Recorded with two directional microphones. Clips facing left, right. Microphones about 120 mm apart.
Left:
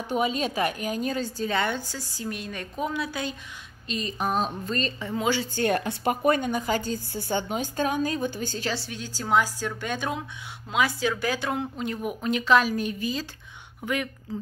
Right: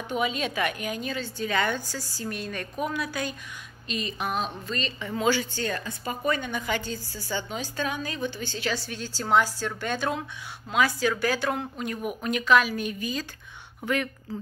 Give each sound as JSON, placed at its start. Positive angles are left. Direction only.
{"t": 0.1, "sound": "a woman's voice", "side_deg": 40}
{"t": 1.5, "sound": "a woman's voice", "side_deg": 25}
{"t": 3.8, "sound": "a woman's voice", "side_deg": 35}
{"t": 5.0, "sound": "a woman's voice", "side_deg": 20}
{"t": 5.5, "sound": "a woman's voice", "side_deg": 60}
{"t": 7.2, "sound": "a woman's voice", "side_deg": 55}
{"t": 8.7, "sound": "a woman's voice", "side_deg": 20}
{"t": 13.8, "sound": "a woman's voice", "side_deg": 10}